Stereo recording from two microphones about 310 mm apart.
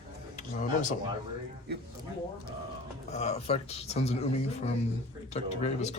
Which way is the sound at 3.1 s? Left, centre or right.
Left.